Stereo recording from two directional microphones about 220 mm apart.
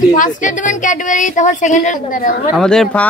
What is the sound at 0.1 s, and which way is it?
A woman's voice, 35° left (ahead or behind).